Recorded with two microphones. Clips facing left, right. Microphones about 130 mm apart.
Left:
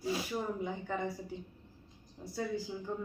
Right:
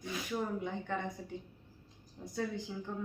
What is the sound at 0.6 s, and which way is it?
A woman's voice, 5° left (ahead or behind).